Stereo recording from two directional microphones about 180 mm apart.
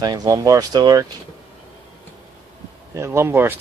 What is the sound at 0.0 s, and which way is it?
Speech, 20° right (ahead or behind).